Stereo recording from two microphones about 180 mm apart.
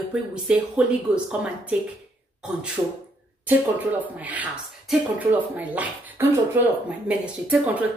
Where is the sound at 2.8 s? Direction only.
20° right (ahead or behind).